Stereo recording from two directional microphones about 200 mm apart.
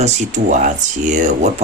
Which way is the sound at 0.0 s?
35° right (ahead or behind).